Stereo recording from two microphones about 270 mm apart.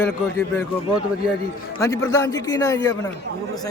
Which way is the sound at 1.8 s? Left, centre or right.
Centre.